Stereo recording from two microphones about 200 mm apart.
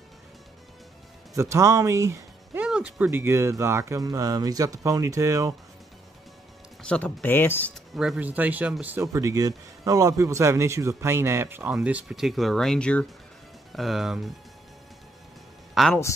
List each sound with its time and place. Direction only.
1.3 s speech: 15° right (ahead or behind)
6.8 s speech: 5° left (ahead or behind)
7.9 s speech: centre (ahead or behind)
15.7 s a man's voice: centre (ahead or behind)